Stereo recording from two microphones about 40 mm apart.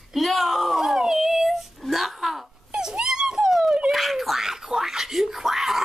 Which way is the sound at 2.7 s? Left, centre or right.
Centre.